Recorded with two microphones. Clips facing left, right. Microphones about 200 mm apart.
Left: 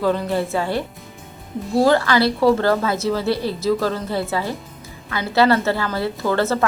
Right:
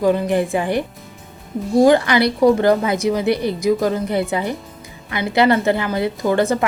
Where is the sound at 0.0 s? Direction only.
15° right (ahead or behind).